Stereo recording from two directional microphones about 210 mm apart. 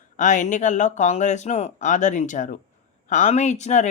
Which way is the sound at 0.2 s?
35° left (ahead or behind).